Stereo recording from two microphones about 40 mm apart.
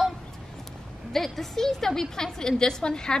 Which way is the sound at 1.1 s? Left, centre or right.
Centre.